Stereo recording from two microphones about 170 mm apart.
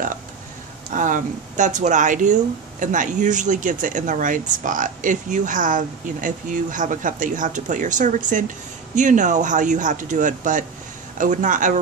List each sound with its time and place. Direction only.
0.9 s speech: 50° right (ahead or behind)